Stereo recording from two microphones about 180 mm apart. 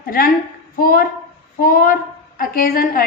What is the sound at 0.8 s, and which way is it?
A woman's voice, 55° left (ahead or behind).